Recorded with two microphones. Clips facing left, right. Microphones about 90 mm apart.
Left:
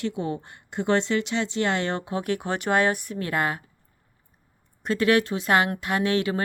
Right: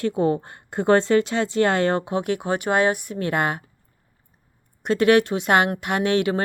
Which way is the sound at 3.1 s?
25° right (ahead or behind).